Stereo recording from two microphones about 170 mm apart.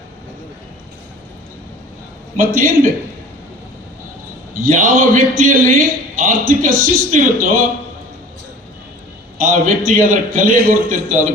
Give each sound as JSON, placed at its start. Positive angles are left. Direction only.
{"t": 2.3, "sound": "a man's voice", "side_deg": -55}
{"t": 4.5, "sound": "a man's voice", "side_deg": -50}
{"t": 9.4, "sound": "a man's voice", "side_deg": -50}